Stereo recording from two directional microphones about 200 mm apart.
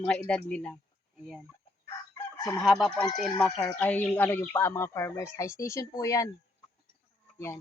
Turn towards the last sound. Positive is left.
turn(degrees=15)  # may be behind; listen again after turning